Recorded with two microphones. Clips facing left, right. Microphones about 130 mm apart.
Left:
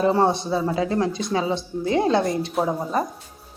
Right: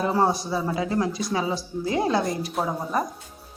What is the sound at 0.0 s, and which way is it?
A man's voice, 25° left (ahead or behind).